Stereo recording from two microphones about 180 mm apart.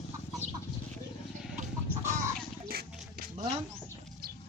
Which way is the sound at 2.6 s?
55° right (ahead or behind).